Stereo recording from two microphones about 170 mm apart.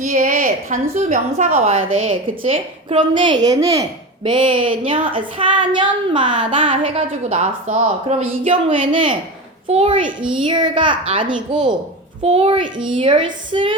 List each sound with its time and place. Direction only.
0.0 s a woman's voice: 50° right (ahead or behind); by 13.7 s 30° right (ahead or behind)